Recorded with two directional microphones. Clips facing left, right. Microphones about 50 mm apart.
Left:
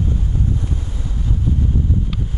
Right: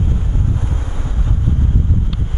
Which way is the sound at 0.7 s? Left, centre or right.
Right.